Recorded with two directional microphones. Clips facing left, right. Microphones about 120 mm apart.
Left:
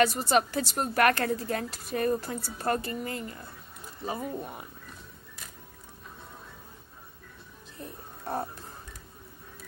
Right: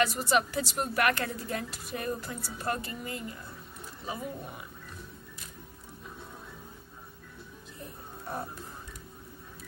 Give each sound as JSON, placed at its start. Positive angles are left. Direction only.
{"t": 0.0, "sound": "a woman's voice", "side_deg": 40}